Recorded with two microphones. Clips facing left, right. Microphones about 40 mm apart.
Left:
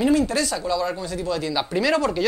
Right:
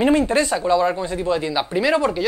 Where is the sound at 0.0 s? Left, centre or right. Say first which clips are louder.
Right 3 dB; right.